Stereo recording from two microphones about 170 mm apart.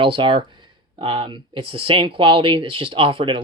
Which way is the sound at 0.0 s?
30° right (ahead or behind).